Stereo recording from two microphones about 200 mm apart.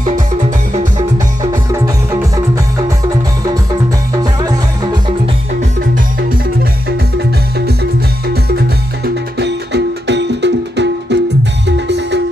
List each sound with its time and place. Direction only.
0.0 s music: 40° right (ahead or behind)
1.1 s music: 15° right (ahead or behind)
4.2 s music: 20° right (ahead or behind)
7.2 s music: 55° right (ahead or behind)